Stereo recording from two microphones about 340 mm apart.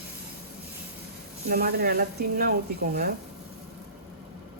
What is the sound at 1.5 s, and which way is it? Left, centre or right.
Speech, right.